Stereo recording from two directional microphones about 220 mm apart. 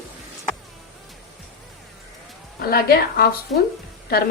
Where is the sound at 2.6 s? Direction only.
45° left (ahead or behind).